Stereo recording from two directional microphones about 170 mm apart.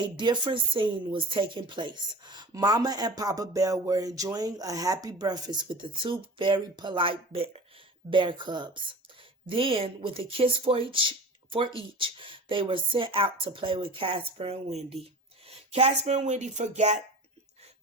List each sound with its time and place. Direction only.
0.0 s speech: 25° right (ahead or behind); by 17.0 s 45° right (ahead or behind)